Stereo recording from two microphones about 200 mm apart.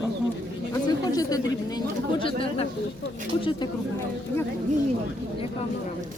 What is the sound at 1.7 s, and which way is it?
Speech, 25° left (ahead or behind).